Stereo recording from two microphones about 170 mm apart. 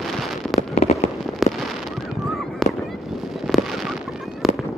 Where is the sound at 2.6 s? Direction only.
Centre (ahead or behind).